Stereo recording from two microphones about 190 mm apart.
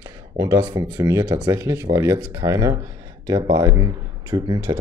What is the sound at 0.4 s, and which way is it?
Speech, 15° right (ahead or behind).